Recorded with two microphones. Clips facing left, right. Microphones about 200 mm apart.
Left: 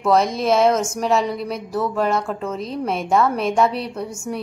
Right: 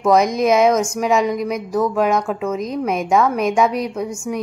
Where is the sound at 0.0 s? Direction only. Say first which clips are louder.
Right 3 dB; 15° right (ahead or behind).